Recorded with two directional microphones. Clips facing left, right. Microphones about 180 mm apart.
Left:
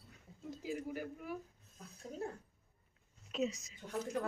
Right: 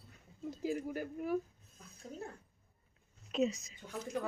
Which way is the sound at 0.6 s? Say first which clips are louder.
Right 4 dB; 45° right (ahead or behind).